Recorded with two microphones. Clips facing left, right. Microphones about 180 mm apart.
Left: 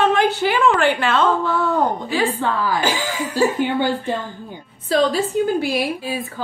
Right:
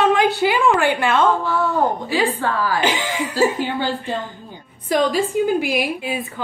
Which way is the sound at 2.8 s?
25° right (ahead or behind).